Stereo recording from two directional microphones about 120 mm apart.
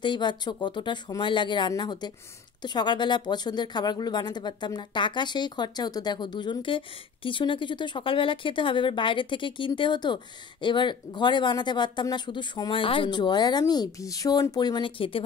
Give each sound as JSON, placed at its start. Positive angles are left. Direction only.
{"t": 0.0, "sound": "a woman's voice", "side_deg": 40}